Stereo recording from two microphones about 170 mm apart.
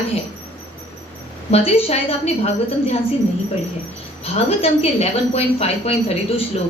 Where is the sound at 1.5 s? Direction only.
35° left (ahead or behind).